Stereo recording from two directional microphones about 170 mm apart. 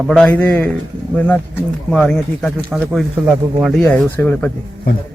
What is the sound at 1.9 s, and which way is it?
Speech, 5° left (ahead or behind).